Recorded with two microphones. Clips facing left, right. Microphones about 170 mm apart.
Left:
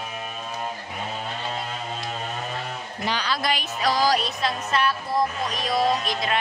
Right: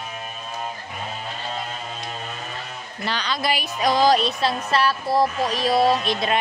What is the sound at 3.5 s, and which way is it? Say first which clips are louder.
Music: right 5 dB; 15° right (ahead or behind).